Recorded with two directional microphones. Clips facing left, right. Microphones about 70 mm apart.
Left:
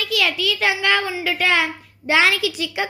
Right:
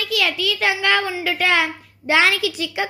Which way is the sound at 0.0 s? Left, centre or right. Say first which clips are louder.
Even; right.